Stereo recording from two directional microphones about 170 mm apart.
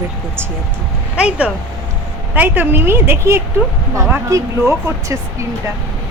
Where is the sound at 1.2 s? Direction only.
5° right (ahead or behind).